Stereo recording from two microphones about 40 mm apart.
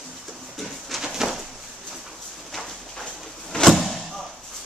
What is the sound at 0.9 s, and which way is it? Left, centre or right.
Bird, centre.